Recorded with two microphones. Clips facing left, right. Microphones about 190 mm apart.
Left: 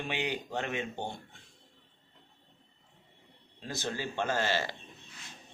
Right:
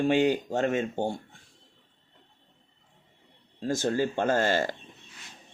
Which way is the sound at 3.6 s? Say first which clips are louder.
Right 10 dB; 45° right (ahead or behind).